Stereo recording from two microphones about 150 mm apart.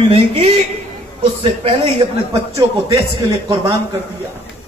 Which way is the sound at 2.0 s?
30° right (ahead or behind).